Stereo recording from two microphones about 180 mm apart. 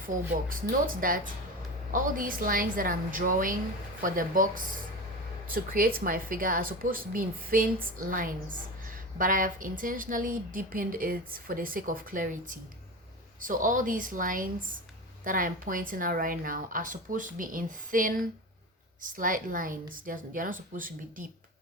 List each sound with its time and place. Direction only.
0.0 s a woman's voice: 50° right (ahead or behind)